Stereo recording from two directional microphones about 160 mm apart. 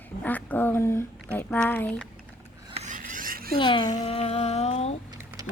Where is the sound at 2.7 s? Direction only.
50° right (ahead or behind); by 3.6 s 65° right (ahead or behind).